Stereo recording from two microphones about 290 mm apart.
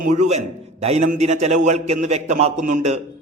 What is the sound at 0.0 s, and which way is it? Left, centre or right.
A man's voice, right.